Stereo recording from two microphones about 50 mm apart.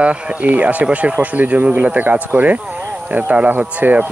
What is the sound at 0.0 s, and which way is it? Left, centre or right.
Speech, right.